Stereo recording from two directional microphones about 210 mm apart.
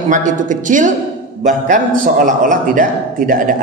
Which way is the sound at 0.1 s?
35° right (ahead or behind).